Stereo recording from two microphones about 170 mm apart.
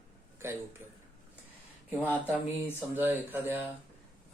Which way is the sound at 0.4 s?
15° right (ahead or behind).